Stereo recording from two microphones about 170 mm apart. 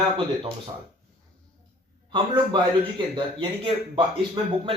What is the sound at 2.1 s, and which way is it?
Speech, 25° right (ahead or behind).